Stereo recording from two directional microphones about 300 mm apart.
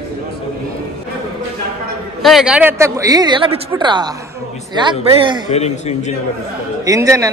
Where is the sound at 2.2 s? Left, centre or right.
Centre.